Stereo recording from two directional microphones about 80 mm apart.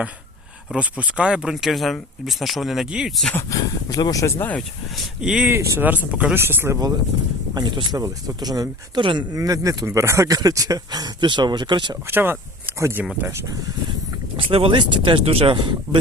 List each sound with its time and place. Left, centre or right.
0.8 s speech: centre
3.5 s speech: left
4.4 s speech: left
5.2 s speech: centre
5.5 s speech: right
5.8 s speech: centre
6.3 s speech: right
7.5 s speech: right
7.9 s speech: right
9.0 s speech: right
9.3 s speech: right
11.3 s speech: right
12.0 s speech: right
14.3 s speech: right